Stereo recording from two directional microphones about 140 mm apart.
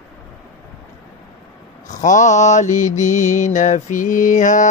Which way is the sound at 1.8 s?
65° left (ahead or behind).